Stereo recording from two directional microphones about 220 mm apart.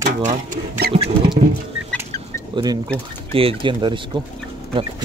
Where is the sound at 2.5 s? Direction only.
20° right (ahead or behind).